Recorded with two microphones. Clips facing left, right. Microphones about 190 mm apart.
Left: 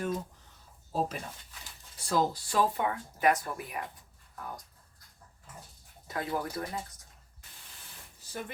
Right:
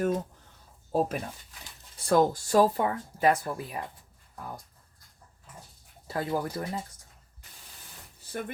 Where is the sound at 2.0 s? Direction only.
50° right (ahead or behind); by 3.8 s 30° right (ahead or behind).